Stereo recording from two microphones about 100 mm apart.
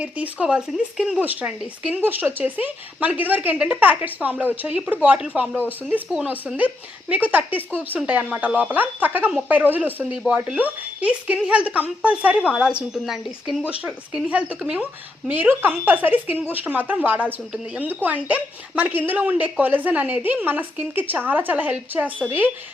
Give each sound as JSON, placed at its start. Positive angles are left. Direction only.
{"t": 0.0, "sound": "speech", "side_deg": -10}